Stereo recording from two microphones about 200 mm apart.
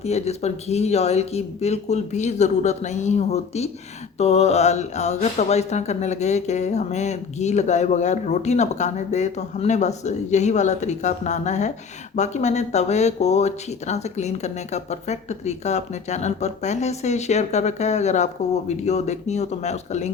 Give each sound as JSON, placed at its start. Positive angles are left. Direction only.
{"t": 0.0, "sound": "speech", "side_deg": 30}